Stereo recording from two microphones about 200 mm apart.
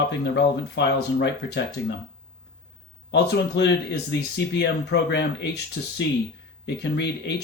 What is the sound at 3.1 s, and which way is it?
Speech, 55° left (ahead or behind).